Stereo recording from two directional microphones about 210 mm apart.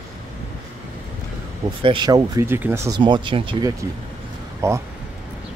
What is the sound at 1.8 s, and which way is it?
Speech, 20° right (ahead or behind).